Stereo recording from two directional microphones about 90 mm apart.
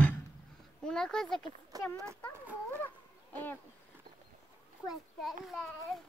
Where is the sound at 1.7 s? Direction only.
45° right (ahead or behind).